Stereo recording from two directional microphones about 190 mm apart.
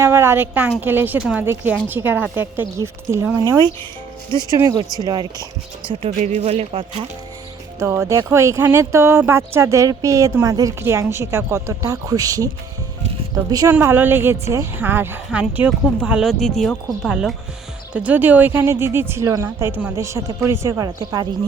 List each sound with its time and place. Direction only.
0.0 s speech: 15° right (ahead or behind)
6.2 s speech: 35° right (ahead or behind)
7.8 s speech: 15° right (ahead or behind)
13.5 s speech: 15° right (ahead or behind)